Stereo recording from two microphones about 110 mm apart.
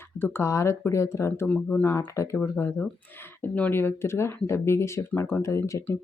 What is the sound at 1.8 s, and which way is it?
Speech, 25° left (ahead or behind).